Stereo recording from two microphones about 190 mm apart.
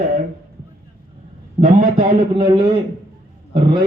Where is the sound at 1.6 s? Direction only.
45° right (ahead or behind).